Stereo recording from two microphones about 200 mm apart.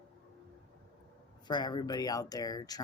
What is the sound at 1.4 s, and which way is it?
Speech, 20° left (ahead or behind).